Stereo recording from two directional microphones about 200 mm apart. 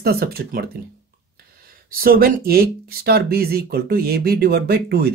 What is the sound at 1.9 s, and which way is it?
Speech, 50° right (ahead or behind).